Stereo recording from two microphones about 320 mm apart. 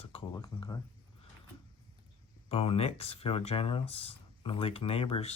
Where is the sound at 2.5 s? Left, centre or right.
Centre.